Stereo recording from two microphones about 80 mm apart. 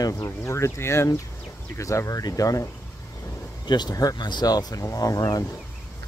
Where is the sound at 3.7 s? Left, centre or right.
Left.